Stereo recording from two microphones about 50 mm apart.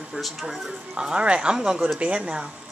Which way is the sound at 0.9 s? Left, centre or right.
Centre.